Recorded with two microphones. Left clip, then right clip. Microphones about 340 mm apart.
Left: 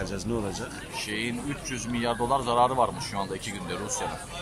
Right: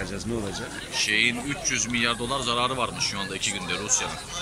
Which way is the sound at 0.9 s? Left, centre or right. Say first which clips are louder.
Right 10 dB; left.